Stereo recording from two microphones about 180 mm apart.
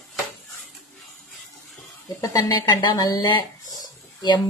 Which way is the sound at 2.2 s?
20° left (ahead or behind).